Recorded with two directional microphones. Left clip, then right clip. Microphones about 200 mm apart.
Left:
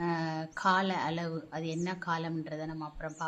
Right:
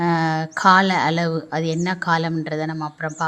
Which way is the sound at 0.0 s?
30° right (ahead or behind).